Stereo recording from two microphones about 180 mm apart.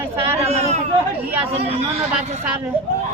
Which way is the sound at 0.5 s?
35° right (ahead or behind).